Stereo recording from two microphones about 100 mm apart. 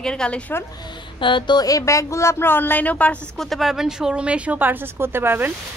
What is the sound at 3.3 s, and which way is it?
Speech, centre (ahead or behind).